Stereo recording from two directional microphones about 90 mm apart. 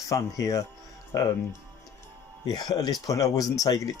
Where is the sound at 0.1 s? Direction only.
40° left (ahead or behind).